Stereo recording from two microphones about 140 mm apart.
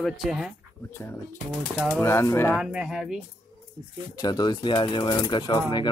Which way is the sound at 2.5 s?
5° right (ahead or behind).